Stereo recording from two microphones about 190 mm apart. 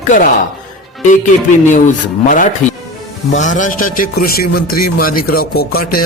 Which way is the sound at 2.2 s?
40° left (ahead or behind).